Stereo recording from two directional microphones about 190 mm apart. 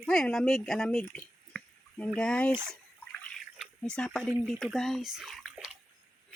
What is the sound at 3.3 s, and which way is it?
Drip, centre (ahead or behind).